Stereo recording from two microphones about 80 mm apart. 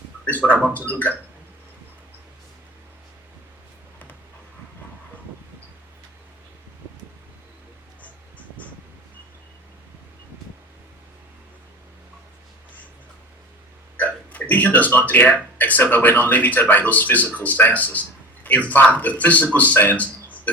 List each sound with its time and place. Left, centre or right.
0.3 s a sound: left
0.9 s speech: centre
13.9 s speech: left